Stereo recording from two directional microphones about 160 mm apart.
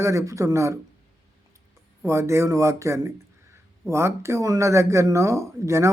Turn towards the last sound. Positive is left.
turn(degrees=-20)  # may be behind; listen again after turning